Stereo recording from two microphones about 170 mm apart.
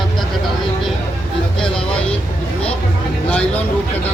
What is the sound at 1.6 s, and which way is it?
Speech, 5° left (ahead or behind).